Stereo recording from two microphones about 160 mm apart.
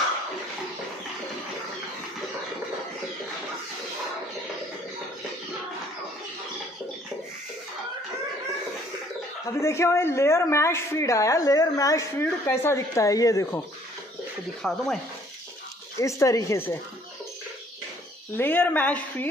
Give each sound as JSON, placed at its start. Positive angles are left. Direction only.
{"t": 9.5, "sound": "speech", "side_deg": 20}
{"t": 14.6, "sound": "speech", "side_deg": 0}
{"t": 16.0, "sound": "speech", "side_deg": 20}
{"t": 18.3, "sound": "a woman's voice", "side_deg": 10}